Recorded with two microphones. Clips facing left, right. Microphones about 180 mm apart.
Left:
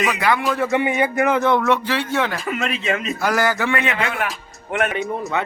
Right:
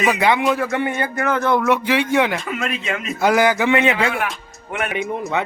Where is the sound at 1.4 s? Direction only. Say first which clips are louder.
Right 3 dB; centre (ahead or behind).